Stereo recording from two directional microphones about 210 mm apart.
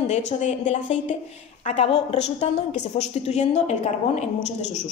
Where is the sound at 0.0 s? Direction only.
35° left (ahead or behind).